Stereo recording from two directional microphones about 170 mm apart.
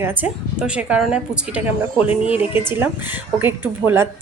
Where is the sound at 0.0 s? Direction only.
10° right (ahead or behind).